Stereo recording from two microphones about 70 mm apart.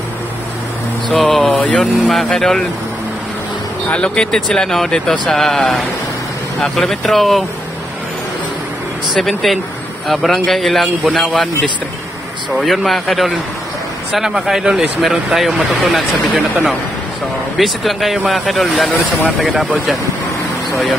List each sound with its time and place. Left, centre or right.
1.1 s speech: centre
1.5 s speech: left
1.8 s a man's voice: centre
3.9 s a man's voice: centre
9.1 s a man's voice: centre
12.5 s a man's voice: centre
17.6 s a man's voice: centre